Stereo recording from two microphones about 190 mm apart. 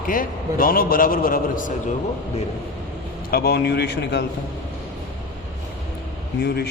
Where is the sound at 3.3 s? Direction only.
55° left (ahead or behind).